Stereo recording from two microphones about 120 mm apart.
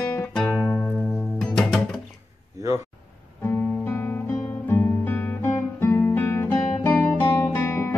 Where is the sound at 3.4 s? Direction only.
15° left (ahead or behind).